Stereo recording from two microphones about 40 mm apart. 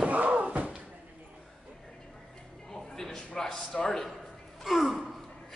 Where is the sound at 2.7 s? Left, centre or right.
Centre.